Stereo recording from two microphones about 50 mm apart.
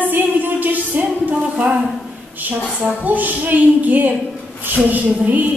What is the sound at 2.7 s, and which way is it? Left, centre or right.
A woman's voice, right.